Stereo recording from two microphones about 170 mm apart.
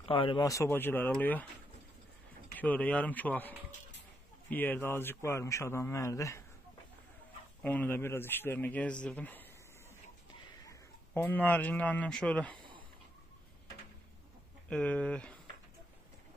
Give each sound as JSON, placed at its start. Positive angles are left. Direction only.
{"t": 0.1, "sound": "speech", "side_deg": 30}
{"t": 0.5, "sound": "a man's voice", "side_deg": 15}
{"t": 2.6, "sound": "a man's voice", "side_deg": 10}
{"t": 7.6, "sound": "a man's voice", "side_deg": 10}
{"t": 10.7, "sound": "speech", "side_deg": 10}
{"t": 14.7, "sound": "a man's voice", "side_deg": 5}